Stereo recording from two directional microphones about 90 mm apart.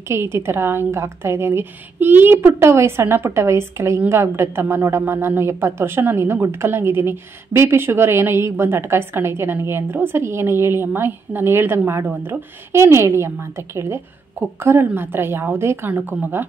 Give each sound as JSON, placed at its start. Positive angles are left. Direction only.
{"t": 0.1, "sound": "speech", "side_deg": -30}